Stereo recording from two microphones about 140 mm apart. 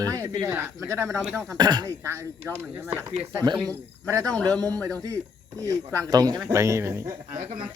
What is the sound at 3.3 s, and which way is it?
Speech, 25° right (ahead or behind).